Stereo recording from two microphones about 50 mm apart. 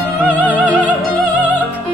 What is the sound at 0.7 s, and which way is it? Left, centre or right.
Music, right.